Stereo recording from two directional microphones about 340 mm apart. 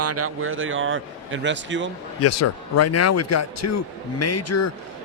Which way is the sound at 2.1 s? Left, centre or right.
Left.